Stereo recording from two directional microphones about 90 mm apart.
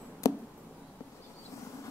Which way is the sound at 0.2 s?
40° left (ahead or behind).